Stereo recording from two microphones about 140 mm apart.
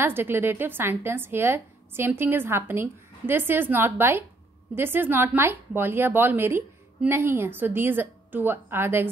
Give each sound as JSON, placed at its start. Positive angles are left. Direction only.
{"t": 0.0, "sound": "speech", "side_deg": -15}